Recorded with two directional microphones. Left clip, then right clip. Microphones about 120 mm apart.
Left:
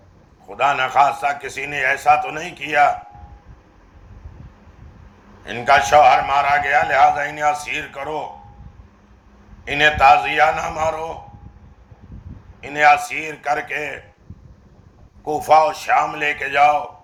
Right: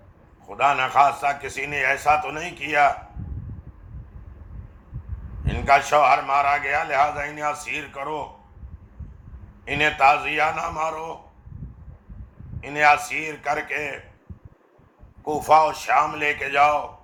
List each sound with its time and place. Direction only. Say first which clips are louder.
0.4 s a man's voice: left 2 dB; 30° right (ahead or behind)
5.5 s a man's voice: left 4 dB; 30° right (ahead or behind)
7.0 s a man's voice: left 7 dB; 25° right (ahead or behind)
9.6 s a man's voice: left 5 dB; 30° right (ahead or behind)
12.6 s a man's voice: left 4 dB; 35° right (ahead or behind)
15.2 s a man's voice: left 3 dB; 30° right (ahead or behind)